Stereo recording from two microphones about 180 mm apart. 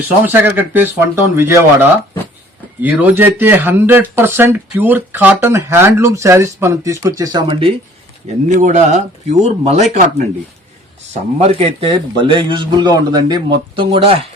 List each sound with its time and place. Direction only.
0.3 s speech: 10° right (ahead or behind); by 7.8 s 30° right (ahead or behind)
8.4 s speech: 40° right (ahead or behind)
11.1 s a man's voice: 35° right (ahead or behind)